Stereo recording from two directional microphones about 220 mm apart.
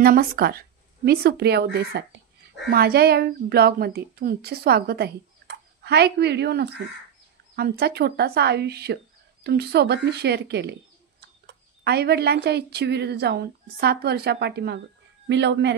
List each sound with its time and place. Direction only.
0.0 s a woman's voice: 40° right (ahead or behind)